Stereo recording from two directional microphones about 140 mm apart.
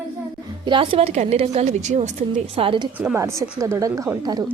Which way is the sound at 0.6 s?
35° right (ahead or behind).